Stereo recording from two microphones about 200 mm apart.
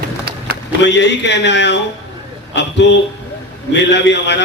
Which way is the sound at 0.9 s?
60° left (ahead or behind).